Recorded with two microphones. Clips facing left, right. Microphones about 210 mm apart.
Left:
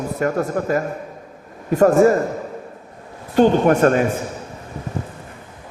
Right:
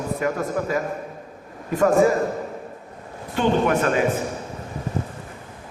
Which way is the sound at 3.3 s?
45° left (ahead or behind).